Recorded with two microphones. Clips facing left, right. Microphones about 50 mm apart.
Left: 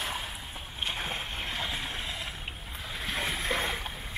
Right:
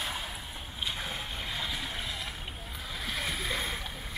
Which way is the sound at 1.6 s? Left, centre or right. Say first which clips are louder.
Left 1 dB; left.